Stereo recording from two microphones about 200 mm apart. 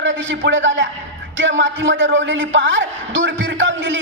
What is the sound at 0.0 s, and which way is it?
A man's voice, 70° right (ahead or behind).